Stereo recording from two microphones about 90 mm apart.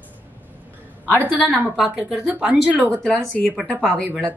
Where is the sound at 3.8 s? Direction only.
Centre (ahead or behind).